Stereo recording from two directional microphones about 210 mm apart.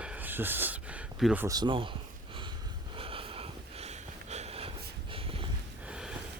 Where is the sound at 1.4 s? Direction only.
20° right (ahead or behind).